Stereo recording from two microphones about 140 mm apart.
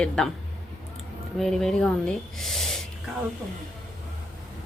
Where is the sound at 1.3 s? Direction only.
5° left (ahead or behind).